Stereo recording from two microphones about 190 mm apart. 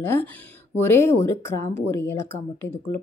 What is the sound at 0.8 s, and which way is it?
Speech, 15° left (ahead or behind).